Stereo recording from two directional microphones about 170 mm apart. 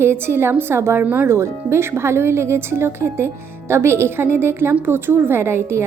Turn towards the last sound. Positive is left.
turn(degrees=-15)  # may be behind; listen again after turning